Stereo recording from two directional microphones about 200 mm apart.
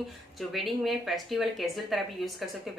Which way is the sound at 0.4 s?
Centre (ahead or behind).